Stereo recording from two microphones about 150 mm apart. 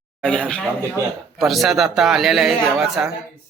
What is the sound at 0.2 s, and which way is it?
Speech, 5° left (ahead or behind).